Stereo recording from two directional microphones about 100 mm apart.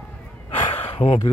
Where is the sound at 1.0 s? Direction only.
65° left (ahead or behind).